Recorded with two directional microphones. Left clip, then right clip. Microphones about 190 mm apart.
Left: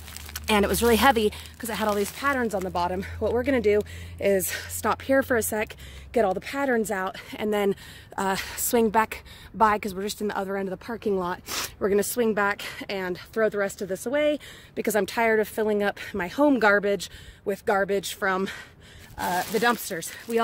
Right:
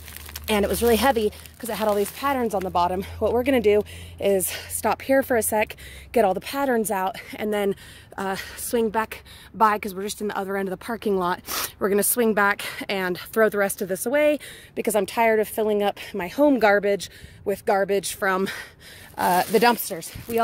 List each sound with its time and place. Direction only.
0.3 s speech: centre (ahead or behind)
8.3 s a woman's voice: 10° left (ahead or behind)
9.6 s speech: centre (ahead or behind)
10.5 s speech: 20° right (ahead or behind)
14.8 s speech: 5° right (ahead or behind); by 18.7 s 25° right (ahead or behind)
19.1 s speech: 45° right (ahead or behind)
19.9 s speech: centre (ahead or behind)